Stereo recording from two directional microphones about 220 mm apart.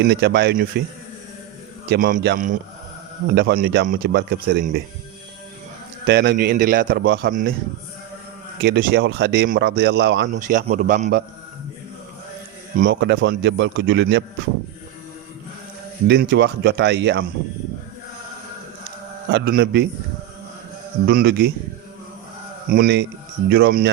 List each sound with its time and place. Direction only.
0.0 s speech: 50° right (ahead or behind)
1.9 s a man's voice: 40° right (ahead or behind)
6.1 s speech: 50° right (ahead or behind)
6.3 s a man's voice: 40° right (ahead or behind)
8.6 s speech: 45° right (ahead or behind)
10.3 s a man's voice: 35° right (ahead or behind)
12.7 s speech: 40° right (ahead or behind)
16.0 s speech: 50° right (ahead or behind)
19.3 s speech: 45° right (ahead or behind)
21.1 s speech: 50° right (ahead or behind)
22.7 s speech: 45° right (ahead or behind)